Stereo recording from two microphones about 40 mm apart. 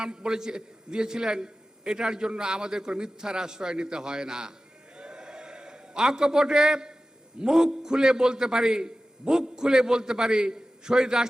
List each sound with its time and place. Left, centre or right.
0.0 s a man's voice: right
4.9 s a sound: right
7.4 s a man's voice: centre